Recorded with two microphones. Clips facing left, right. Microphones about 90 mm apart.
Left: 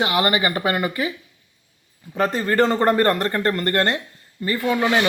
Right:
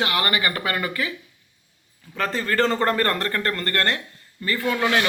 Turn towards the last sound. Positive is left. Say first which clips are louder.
# left 2 dB
turn(degrees=15)  # may be behind; listen again after turning